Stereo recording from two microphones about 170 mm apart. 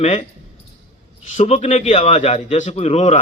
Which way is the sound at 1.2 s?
40° left (ahead or behind).